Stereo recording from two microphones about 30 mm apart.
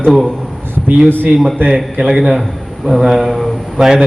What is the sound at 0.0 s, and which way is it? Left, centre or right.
Speech, centre.